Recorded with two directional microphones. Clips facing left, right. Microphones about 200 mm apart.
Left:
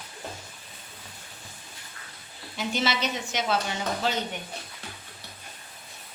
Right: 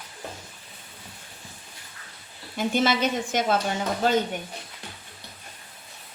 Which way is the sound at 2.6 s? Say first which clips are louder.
Right 5 dB; 50° right (ahead or behind).